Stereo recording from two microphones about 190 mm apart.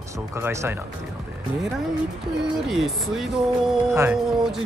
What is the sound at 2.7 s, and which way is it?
Speech, centre (ahead or behind).